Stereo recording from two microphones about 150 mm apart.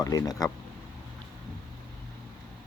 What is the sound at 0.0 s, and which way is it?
Speech, 25° left (ahead or behind).